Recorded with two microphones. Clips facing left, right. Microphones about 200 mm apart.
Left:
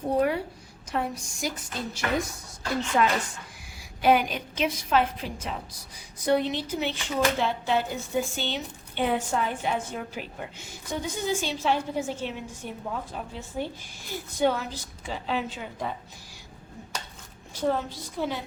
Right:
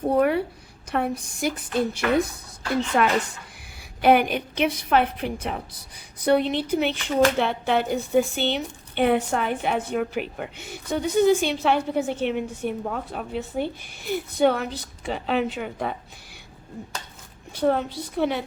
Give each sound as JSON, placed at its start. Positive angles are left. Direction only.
{"t": 0.2, "sound": "a woman's voice", "side_deg": -60}
{"t": 4.0, "sound": "speech", "side_deg": -60}
{"t": 17.5, "sound": "speech", "side_deg": -65}